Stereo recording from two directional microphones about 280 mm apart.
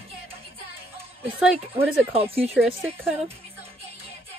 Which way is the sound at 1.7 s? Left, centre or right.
Right.